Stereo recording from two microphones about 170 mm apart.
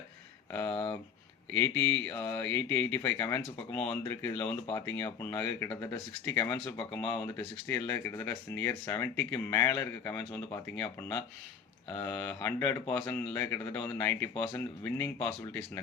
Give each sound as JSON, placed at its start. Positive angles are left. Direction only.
{"t": 0.7, "sound": "speech", "side_deg": 35}
{"t": 1.5, "sound": "speech", "side_deg": 10}